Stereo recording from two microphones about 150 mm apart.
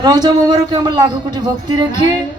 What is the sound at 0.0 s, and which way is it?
A man's voice, 25° right (ahead or behind).